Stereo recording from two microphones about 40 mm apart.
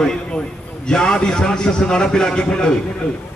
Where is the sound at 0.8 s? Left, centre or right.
Centre.